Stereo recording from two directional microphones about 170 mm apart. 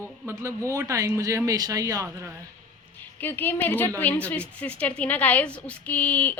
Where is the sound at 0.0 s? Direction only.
15° right (ahead or behind).